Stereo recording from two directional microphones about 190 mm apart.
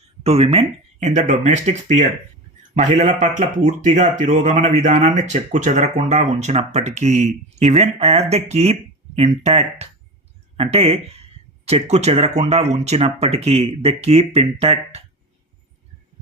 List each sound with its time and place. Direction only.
0.2 s speech: 30° right (ahead or behind)